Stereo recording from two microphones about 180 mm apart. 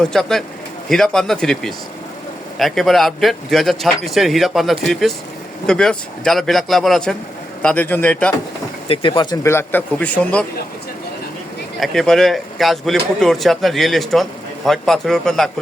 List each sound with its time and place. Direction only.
0.0 s a man's voice: 5° left (ahead or behind)
8.9 s speech: 30° left (ahead or behind); by 10.2 s 10° left (ahead or behind)
11.8 s speech: centre (ahead or behind)